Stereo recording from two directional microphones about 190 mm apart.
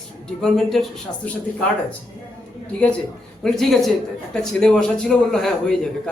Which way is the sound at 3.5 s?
Centre (ahead or behind).